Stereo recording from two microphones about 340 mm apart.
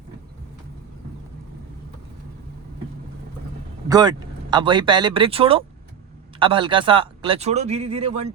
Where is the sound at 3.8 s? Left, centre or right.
Centre.